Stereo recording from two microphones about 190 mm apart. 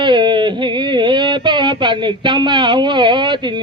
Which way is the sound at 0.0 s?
25° right (ahead or behind).